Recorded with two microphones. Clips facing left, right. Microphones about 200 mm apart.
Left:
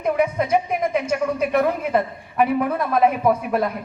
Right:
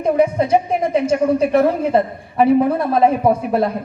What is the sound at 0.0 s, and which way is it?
A woman's voice, 30° right (ahead or behind).